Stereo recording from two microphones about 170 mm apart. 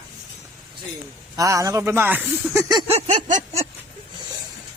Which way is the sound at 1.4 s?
20° right (ahead or behind).